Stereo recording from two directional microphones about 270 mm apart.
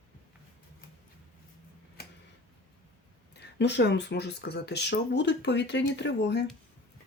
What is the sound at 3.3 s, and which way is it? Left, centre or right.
Speech, left.